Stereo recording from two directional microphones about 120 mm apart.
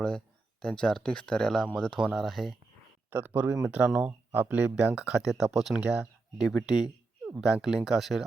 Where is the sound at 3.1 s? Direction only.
20° right (ahead or behind).